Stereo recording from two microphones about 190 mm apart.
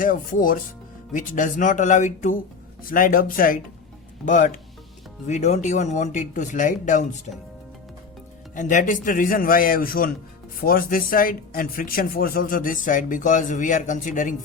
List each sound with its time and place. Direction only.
0.0 s speech: 45° left (ahead or behind)
8.5 s speech: 40° left (ahead or behind)